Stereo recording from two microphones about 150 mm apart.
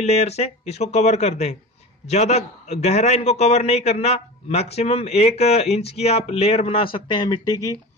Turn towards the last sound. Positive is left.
turn(degrees=25)  # may be behind; listen again after turning